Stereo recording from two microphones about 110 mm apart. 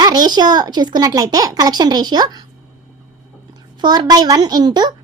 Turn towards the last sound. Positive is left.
turn(degrees=-40)  # may be behind; listen again after turning